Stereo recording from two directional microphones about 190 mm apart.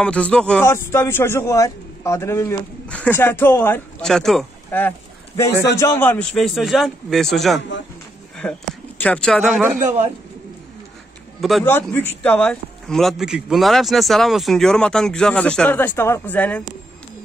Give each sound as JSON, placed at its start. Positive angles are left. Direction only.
{"t": 0.0, "sound": "a man's voice", "side_deg": 5}
{"t": 4.6, "sound": "a sound", "side_deg": 10}
{"t": 5.8, "sound": "a man's voice", "side_deg": 10}
{"t": 9.8, "sound": "a man's voice", "side_deg": -40}
{"t": 11.6, "sound": "a man's voice", "side_deg": 10}